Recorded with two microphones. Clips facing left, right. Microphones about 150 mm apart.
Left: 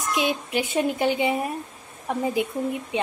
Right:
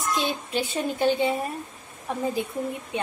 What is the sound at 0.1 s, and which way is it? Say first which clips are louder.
A woman's voice: left 3 dB; 15° left (ahead or behind).